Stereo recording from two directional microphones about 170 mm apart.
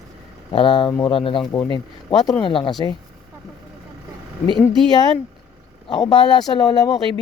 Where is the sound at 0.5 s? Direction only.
30° left (ahead or behind).